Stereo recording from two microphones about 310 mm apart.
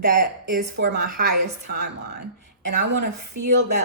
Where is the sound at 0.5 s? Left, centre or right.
Right.